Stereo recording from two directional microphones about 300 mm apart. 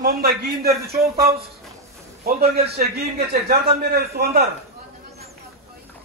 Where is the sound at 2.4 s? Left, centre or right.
Right.